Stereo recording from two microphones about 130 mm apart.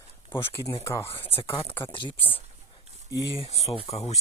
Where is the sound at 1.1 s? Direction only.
45° left (ahead or behind).